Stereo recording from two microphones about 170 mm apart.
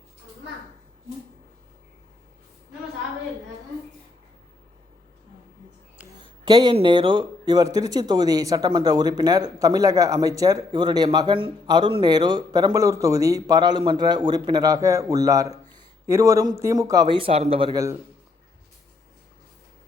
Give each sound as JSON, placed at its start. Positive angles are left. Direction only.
{"t": 6.1, "sound": "speech", "side_deg": -25}
{"t": 17.7, "sound": "speech", "side_deg": -20}